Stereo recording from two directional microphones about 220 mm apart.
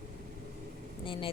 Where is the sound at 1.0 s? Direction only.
25° left (ahead or behind).